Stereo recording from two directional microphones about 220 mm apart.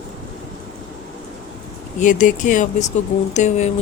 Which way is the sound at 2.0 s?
35° left (ahead or behind).